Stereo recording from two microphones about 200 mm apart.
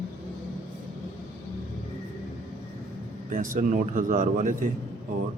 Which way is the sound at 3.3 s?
40° right (ahead or behind).